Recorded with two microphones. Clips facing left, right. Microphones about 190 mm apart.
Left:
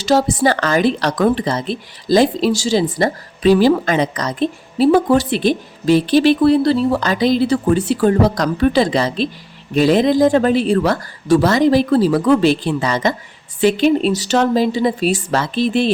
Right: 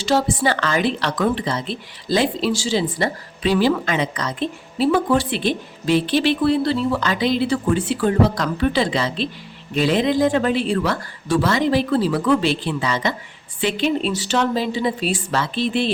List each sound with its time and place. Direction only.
0.0 s speech: 40° left (ahead or behind)